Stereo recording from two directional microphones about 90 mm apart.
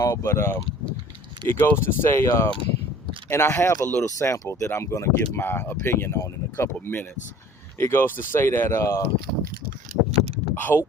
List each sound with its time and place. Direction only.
0.0 s speech: 30° left (ahead or behind)
10.1 s vehicle: 90° right
10.5 s speech: 25° left (ahead or behind)